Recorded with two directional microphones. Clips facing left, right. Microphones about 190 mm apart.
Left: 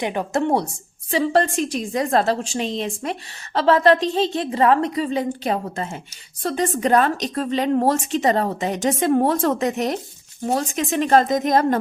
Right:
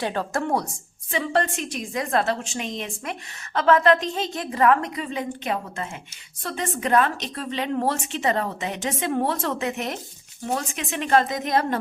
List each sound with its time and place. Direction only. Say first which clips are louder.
0.0 s a woman's voice: left 4 dB; 15° left (ahead or behind)
1.1 s a woman's voice: left 5 dB; 35° left (ahead or behind)